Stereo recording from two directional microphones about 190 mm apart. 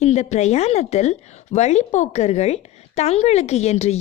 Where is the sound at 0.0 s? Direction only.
35° left (ahead or behind).